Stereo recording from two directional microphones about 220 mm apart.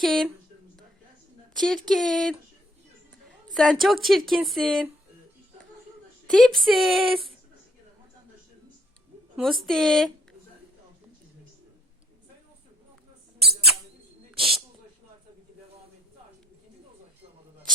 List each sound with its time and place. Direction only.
0.0 s speech: centre (ahead or behind)
1.5 s speech: centre (ahead or behind)
3.5 s speech: centre (ahead or behind)
6.2 s speech: centre (ahead or behind)
9.3 s speech: centre (ahead or behind)
14.3 s a sound: centre (ahead or behind)